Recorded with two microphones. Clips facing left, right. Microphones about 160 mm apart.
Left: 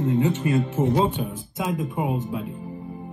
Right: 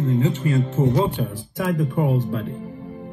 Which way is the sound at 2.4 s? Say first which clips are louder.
Right 2 dB; 90° right.